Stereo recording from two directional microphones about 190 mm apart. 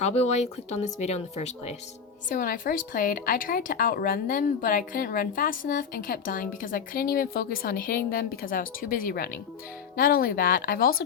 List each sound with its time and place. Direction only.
0.0 s speech: 35° left (ahead or behind)
2.3 s speech: 45° left (ahead or behind)